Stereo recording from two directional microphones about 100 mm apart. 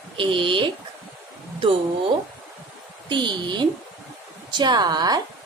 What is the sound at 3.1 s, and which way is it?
A woman's voice, 50° right (ahead or behind).